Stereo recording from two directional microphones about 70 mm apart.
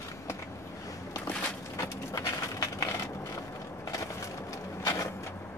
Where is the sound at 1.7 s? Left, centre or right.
Left.